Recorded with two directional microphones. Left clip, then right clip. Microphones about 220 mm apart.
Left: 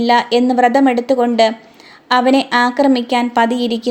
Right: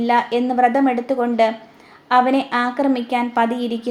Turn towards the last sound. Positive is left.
turn(degrees=40)  # may be behind; listen again after turning